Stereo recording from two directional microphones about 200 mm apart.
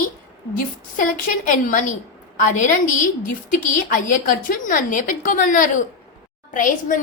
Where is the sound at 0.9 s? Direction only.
40° left (ahead or behind).